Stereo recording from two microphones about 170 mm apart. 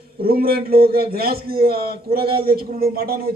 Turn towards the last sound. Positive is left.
turn(degrees=-65)  # may be behind; listen again after turning